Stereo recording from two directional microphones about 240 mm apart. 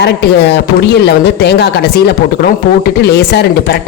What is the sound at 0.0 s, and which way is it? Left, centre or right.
A man's voice, left.